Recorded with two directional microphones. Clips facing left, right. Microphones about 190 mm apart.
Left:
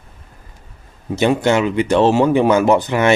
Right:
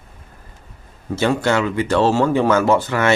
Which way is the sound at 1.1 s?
20° left (ahead or behind).